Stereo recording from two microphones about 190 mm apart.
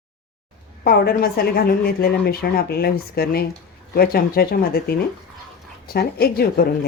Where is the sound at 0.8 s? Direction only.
55° left (ahead or behind).